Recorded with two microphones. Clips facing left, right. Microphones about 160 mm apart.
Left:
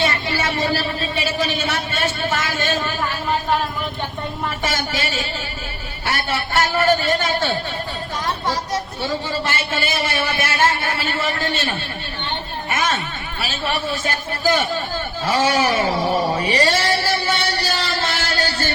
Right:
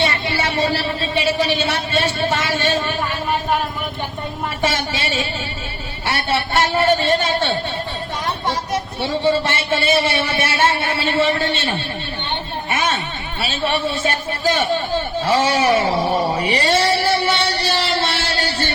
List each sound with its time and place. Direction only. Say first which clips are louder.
0.0 s a sound: right 1 dB; 30° right (ahead or behind)
4.6 s a man's voice: right 4 dB; 30° right (ahead or behind)
9.0 s a man's voice: right 6 dB; 25° right (ahead or behind)
12.7 s a sound: right 1 dB; 30° right (ahead or behind)
13.4 s a man's voice: right 4 dB; 30° right (ahead or behind)
16.5 s music: right 3 dB; 25° right (ahead or behind)